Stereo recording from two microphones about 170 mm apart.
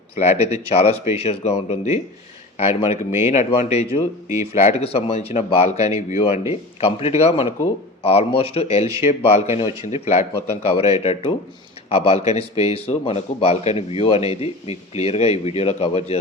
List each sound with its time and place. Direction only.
0.2 s speech: 40° left (ahead or behind)